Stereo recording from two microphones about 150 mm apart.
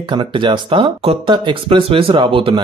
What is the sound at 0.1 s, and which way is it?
Speech, 30° right (ahead or behind).